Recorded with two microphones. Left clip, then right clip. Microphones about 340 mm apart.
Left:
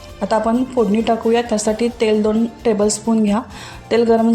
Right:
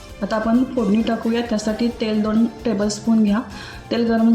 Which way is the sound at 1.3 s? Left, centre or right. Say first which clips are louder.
Left 6 dB; left.